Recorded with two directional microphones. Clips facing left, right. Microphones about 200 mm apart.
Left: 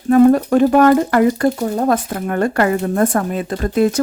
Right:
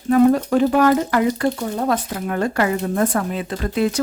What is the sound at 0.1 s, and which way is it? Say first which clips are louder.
Speech: left 4 dB; 45° left (ahead or behind).